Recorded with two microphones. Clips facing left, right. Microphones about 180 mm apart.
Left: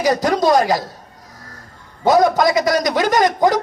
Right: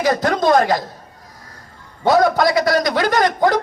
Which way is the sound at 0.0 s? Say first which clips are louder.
Left 1 dB; 15° left (ahead or behind).